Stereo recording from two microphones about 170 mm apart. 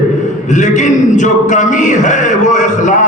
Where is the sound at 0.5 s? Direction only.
45° left (ahead or behind).